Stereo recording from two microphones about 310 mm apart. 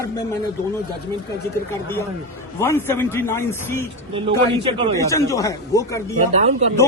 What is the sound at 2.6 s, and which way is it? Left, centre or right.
A man's voice, centre.